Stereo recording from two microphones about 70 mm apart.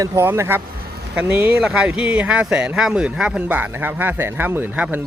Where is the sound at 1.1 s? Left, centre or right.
Centre.